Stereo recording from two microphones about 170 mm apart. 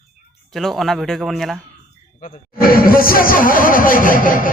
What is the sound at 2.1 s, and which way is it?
Speech, 50° left (ahead or behind).